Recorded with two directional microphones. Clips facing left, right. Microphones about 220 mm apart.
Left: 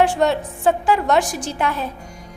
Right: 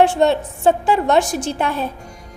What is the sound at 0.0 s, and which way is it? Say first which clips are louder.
A woman's voice: right 3 dB; 25° right (ahead or behind).